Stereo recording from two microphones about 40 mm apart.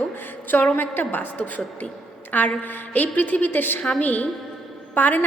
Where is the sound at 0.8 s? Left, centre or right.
Left.